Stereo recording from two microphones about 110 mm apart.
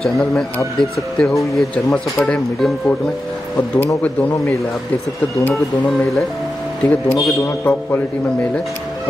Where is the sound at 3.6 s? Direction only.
25° left (ahead or behind).